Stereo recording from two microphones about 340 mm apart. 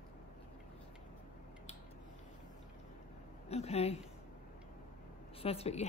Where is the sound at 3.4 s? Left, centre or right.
Centre.